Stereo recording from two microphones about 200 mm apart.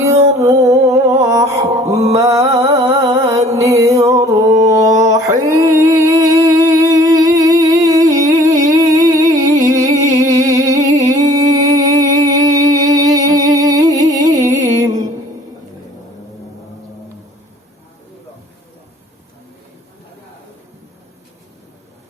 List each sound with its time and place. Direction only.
0.3 s music: 15° right (ahead or behind)
4.3 s mantra: 15° right (ahead or behind)